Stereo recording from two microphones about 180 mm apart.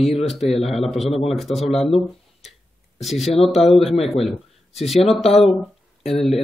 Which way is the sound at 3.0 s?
Centre (ahead or behind).